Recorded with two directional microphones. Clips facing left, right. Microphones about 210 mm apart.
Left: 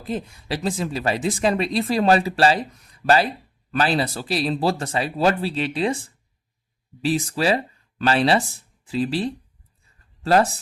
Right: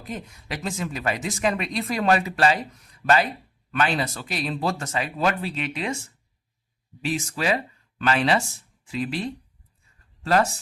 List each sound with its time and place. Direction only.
0.0 s speech: 30° left (ahead or behind)